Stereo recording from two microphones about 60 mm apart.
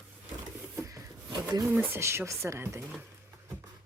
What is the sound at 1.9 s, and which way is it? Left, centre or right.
Speech, right.